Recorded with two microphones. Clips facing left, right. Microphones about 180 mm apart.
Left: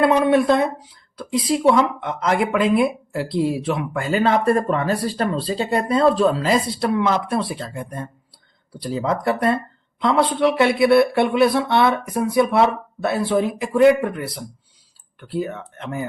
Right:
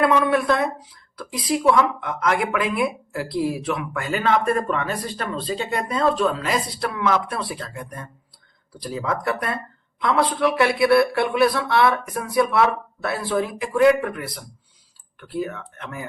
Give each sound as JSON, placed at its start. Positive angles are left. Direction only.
{"t": 0.0, "sound": "speech", "side_deg": 25}